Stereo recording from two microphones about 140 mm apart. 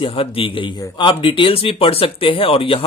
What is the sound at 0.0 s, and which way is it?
Speech, 40° left (ahead or behind).